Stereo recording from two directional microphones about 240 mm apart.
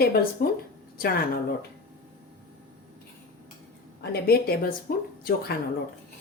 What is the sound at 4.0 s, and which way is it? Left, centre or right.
Speech, left.